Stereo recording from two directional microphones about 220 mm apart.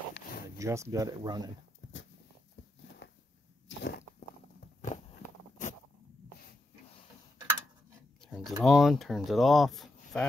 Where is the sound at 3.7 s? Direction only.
50° left (ahead or behind).